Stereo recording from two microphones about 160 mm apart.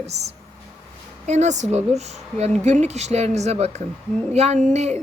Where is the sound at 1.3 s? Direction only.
45° right (ahead or behind).